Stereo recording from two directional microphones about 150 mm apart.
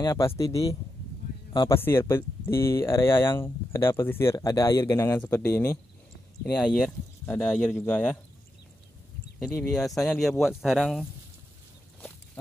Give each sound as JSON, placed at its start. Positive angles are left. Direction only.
{"t": 0.0, "sound": "speech", "side_deg": 25}
{"t": 9.4, "sound": "speech", "side_deg": 5}